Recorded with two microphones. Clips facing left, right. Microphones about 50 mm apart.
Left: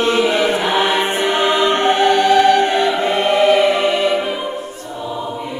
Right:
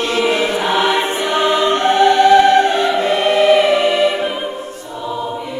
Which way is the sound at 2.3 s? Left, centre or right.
Right.